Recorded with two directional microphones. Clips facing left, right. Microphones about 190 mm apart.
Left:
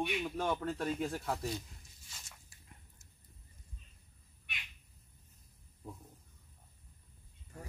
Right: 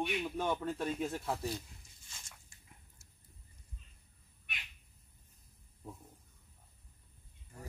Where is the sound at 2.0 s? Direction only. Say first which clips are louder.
Even; 5° left (ahead or behind).